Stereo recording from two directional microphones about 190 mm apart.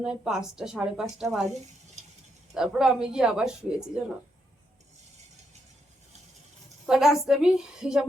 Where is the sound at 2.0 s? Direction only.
35° right (ahead or behind).